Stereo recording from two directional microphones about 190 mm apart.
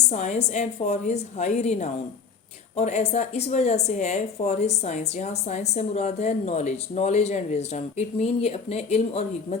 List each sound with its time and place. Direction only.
0.1 s speech: 35° left (ahead or behind)